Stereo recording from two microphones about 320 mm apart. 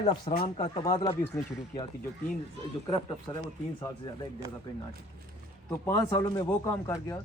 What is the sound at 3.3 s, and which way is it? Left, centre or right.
Speech, centre.